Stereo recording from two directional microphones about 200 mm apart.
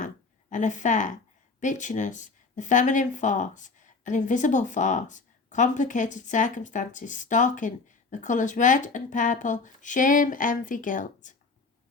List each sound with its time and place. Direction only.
0.5 s speech: 40° left (ahead or behind)